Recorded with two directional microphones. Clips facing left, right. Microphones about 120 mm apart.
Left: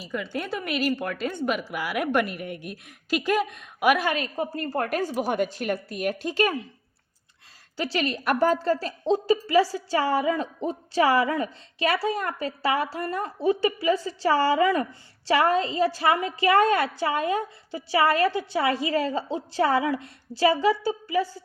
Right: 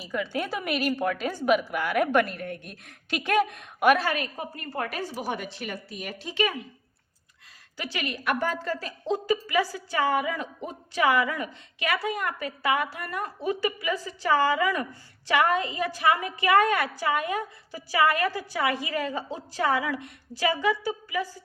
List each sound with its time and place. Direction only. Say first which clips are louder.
0.0 s a woman's voice: right 1 dB; centre (ahead or behind)
3.9 s a woman's voice: left 2 dB; 20° left (ahead or behind); by 6.5 s 45° left (ahead or behind)
7.8 s a woman's voice: left 6 dB; 30° left (ahead or behind)